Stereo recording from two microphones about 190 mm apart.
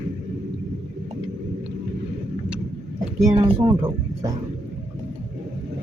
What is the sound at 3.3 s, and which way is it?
Speech, 25° right (ahead or behind).